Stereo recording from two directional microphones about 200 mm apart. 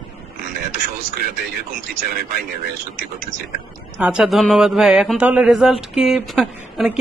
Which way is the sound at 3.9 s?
5° right (ahead or behind).